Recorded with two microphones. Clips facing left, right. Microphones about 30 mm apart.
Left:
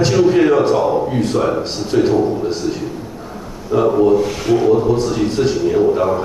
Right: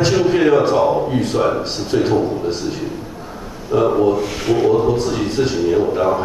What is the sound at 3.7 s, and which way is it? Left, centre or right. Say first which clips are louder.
A man's voice: left 2 dB; centre.